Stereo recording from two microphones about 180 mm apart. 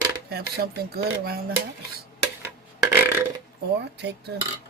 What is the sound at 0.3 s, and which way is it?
Speech, 60° right (ahead or behind).